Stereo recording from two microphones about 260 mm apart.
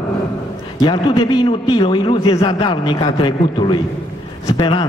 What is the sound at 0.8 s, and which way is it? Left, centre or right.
A man's voice, centre.